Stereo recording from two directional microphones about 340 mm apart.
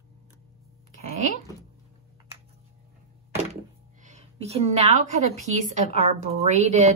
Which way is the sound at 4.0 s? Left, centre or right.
Centre.